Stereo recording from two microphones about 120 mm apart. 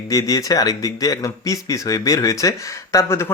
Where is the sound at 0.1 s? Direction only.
30° left (ahead or behind).